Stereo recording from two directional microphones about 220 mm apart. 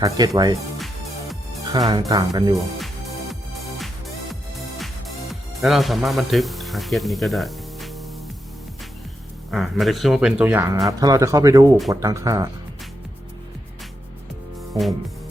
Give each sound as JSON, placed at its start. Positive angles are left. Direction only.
{"t": 0.0, "sound": "speech", "side_deg": -20}
{"t": 1.9, "sound": "speech", "side_deg": -15}
{"t": 2.6, "sound": "music", "side_deg": 0}
{"t": 9.5, "sound": "speech", "side_deg": 0}